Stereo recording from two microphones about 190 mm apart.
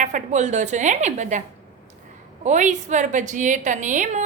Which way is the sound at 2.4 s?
40° right (ahead or behind).